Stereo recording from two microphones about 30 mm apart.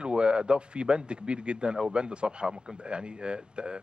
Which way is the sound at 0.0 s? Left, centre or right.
Right.